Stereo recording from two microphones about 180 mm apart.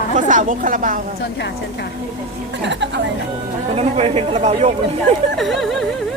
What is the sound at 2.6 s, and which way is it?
Speech, 75° right (ahead or behind).